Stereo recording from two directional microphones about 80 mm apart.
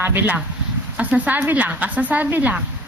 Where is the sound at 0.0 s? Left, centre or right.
Right.